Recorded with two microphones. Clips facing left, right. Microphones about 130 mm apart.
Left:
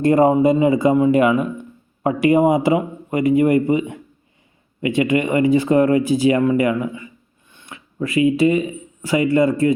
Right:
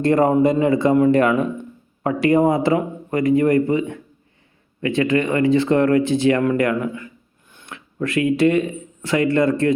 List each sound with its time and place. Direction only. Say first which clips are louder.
0.0 s speech: left 2 dB; 15° left (ahead or behind)